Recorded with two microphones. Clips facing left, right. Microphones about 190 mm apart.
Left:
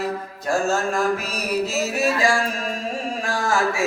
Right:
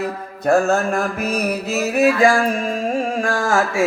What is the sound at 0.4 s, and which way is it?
Music, 60° right (ahead or behind).